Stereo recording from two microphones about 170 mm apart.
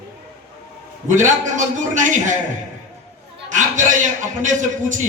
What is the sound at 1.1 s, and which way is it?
A man's voice, 45° right (ahead or behind).